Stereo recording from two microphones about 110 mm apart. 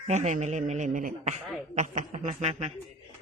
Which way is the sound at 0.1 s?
90° right.